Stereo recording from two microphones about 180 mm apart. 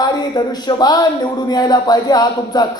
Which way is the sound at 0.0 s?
20° left (ahead or behind).